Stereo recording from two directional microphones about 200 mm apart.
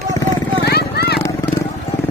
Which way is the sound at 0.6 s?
55° left (ahead or behind).